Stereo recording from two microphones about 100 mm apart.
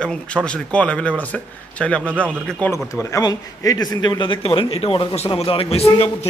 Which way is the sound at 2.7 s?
30° left (ahead or behind).